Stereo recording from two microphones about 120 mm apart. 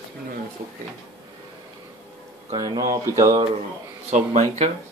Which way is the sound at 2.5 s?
30° right (ahead or behind).